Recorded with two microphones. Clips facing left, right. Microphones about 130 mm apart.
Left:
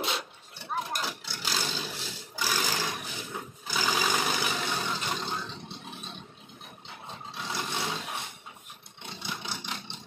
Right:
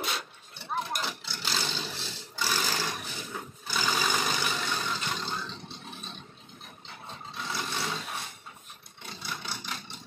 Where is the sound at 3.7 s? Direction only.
10° left (ahead or behind).